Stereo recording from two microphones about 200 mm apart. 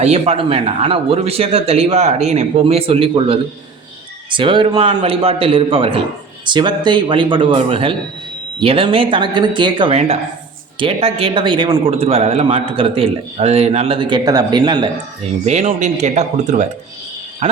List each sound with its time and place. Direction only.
0.0 s a man's voice: 30° right (ahead or behind)
15.4 s speech: 35° right (ahead or behind)